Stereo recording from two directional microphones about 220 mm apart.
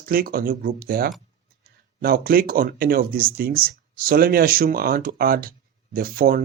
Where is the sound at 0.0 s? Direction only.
40° right (ahead or behind).